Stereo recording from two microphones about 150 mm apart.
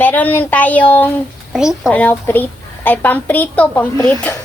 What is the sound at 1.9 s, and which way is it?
A woman's voice, 10° left (ahead or behind).